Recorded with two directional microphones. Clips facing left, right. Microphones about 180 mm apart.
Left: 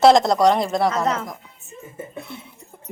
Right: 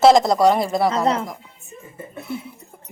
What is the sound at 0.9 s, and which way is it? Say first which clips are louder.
Speech: right 2 dB; 30° right (ahead or behind).